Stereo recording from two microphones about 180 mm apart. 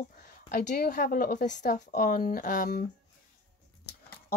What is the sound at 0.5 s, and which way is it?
A woman's voice, 50° left (ahead or behind).